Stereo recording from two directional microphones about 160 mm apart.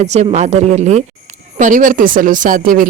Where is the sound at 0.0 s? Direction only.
45° right (ahead or behind).